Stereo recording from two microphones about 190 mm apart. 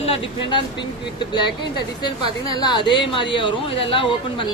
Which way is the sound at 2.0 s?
20° left (ahead or behind).